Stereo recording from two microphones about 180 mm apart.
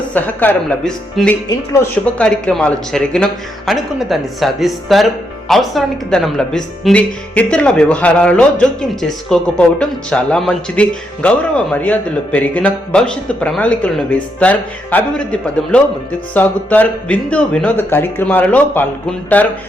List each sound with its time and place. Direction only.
0.1 s speech: 10° left (ahead or behind)
1.5 s speech: 15° left (ahead or behind)
2.2 s speech: 5° left (ahead or behind)